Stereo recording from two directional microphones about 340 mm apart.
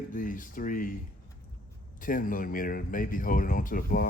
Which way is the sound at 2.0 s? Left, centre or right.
Left.